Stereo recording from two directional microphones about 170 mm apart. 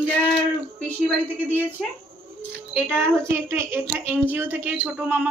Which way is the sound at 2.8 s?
15° right (ahead or behind).